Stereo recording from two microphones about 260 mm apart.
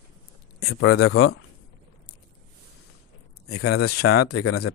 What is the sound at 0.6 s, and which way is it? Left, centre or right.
Speech, left.